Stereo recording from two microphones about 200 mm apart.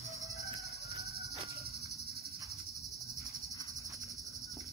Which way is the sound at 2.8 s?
Centre (ahead or behind).